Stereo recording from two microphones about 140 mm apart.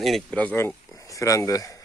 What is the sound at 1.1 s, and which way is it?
Speech, 25° left (ahead or behind).